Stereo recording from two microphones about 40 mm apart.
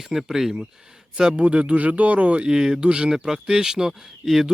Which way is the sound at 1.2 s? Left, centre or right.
Right.